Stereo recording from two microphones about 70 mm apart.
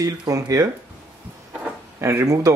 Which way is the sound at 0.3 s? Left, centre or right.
Right.